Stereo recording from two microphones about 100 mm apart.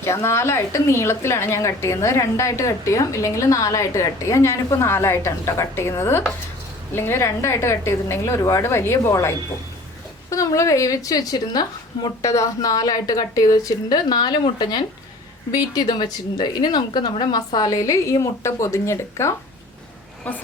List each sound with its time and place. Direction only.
0.0 s a woman's voice: 25° left (ahead or behind)
20.3 s a woman's voice: 15° left (ahead or behind)